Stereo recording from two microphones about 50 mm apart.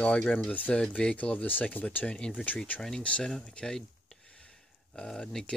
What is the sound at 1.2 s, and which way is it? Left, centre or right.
Speech, left.